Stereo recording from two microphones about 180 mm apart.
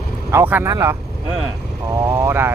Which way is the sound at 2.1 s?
15° right (ahead or behind).